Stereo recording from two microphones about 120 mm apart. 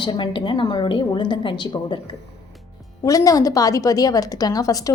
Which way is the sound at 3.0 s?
30° left (ahead or behind).